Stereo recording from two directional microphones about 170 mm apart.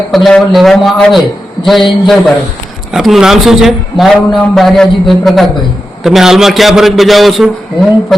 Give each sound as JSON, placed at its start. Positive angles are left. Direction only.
{"t": 0.1, "sound": "a man's voice", "side_deg": 0}